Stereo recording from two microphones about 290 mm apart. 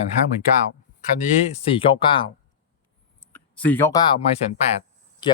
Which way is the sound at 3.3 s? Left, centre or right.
Centre.